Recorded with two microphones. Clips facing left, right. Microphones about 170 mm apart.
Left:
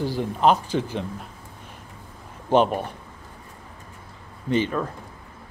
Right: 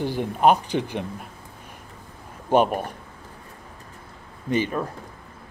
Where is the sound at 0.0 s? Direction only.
15° right (ahead or behind).